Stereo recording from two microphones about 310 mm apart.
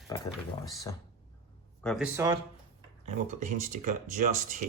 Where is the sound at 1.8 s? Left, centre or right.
Centre.